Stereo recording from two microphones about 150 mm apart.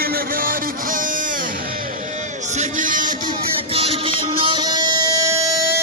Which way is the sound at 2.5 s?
55° right (ahead or behind).